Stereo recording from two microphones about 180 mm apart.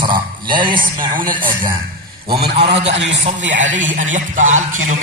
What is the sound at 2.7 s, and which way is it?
Speech, 35° right (ahead or behind).